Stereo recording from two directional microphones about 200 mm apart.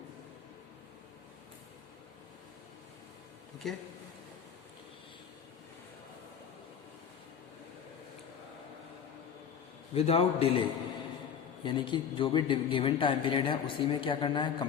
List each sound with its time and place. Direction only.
3.6 s speech: centre (ahead or behind)
9.9 s speech: 30° left (ahead or behind)